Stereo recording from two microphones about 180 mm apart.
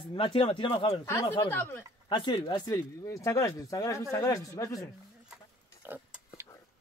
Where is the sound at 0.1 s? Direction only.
30° left (ahead or behind).